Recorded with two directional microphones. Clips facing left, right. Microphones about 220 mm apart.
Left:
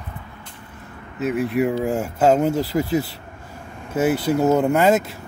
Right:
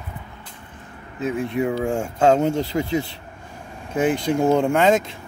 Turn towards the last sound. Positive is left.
turn(degrees=5)  # may be behind; listen again after turning